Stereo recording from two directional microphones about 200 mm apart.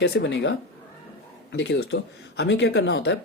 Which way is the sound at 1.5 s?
60° left (ahead or behind).